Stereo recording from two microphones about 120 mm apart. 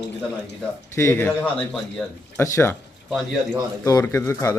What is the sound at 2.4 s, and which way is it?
Speech, 20° left (ahead or behind).